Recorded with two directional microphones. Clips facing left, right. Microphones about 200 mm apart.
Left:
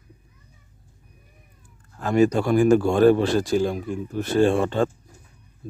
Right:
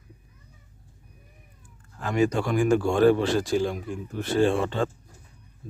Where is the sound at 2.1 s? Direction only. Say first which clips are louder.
Left 5 dB; 40° left (ahead or behind).